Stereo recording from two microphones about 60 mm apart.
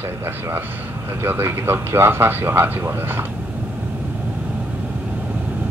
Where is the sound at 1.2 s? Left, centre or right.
Right.